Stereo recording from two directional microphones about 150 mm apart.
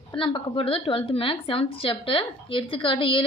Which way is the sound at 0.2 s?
35° left (ahead or behind).